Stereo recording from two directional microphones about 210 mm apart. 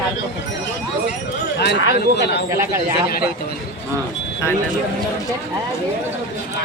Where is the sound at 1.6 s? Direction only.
55° left (ahead or behind).